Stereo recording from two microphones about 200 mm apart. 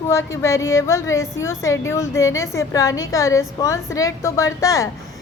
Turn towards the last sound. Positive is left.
turn(degrees=15)  # may be behind; listen again after turning